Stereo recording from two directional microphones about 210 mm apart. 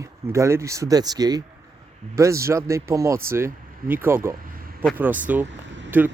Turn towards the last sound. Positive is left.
turn(degrees=-10)  # may be behind; listen again after turning